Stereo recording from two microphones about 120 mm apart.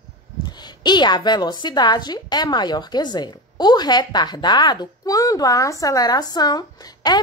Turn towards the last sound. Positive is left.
turn(degrees=35)  # may be behind; listen again after turning